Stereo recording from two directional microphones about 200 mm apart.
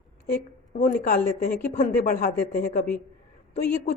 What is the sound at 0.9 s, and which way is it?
Speech, 50° left (ahead or behind).